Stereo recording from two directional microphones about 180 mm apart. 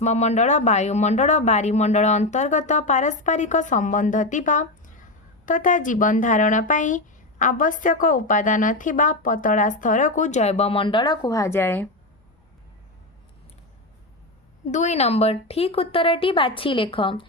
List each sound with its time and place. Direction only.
0.0 s speech: 40° left (ahead or behind); by 11.9 s 10° left (ahead or behind)
14.7 s speech: 40° left (ahead or behind)